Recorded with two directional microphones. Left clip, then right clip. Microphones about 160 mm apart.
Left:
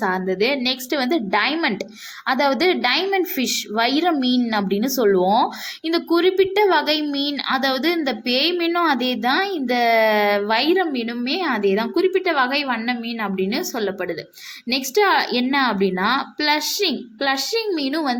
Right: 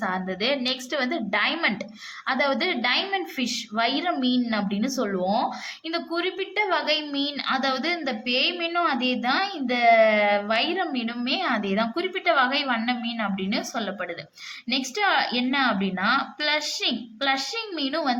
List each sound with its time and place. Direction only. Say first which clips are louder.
0.0 s a woman's voice: left 6 dB; 20° left (ahead or behind)